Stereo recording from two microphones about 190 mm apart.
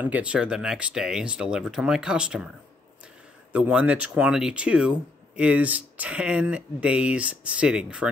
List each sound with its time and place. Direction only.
0.0 s speech: 5° right (ahead or behind)
3.5 s speech: 5° right (ahead or behind)